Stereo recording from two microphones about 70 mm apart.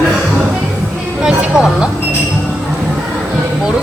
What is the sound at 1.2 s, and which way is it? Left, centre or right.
Speech, centre.